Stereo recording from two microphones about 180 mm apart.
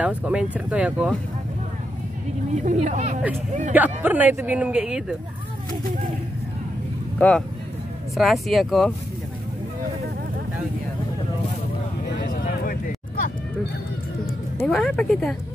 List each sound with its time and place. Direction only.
0.0 s speech: 5° right (ahead or behind)
2.5 s speech: 40° right (ahead or behind)
3.7 s speech: 10° right (ahead or behind)
7.2 s speech: 5° left (ahead or behind)
12.3 s a sound: 50° left (ahead or behind)
14.7 s speech: centre (ahead or behind)